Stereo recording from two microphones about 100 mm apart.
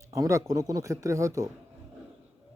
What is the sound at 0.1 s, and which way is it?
Speech, 30° right (ahead or behind).